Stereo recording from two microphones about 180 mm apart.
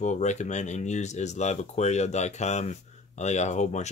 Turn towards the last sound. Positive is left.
turn(degrees=40)  # may be behind; listen again after turning